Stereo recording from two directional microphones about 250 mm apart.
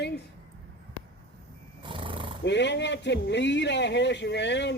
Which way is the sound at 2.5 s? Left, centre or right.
Left.